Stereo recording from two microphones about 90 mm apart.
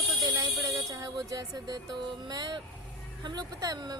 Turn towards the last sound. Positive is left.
turn(degrees=-45)  # may be behind; listen again after turning